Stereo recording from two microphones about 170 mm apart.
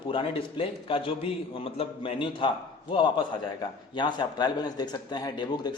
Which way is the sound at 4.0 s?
25° left (ahead or behind).